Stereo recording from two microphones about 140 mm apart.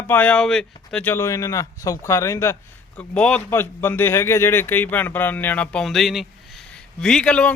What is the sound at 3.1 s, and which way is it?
A man's voice, 5° left (ahead or behind).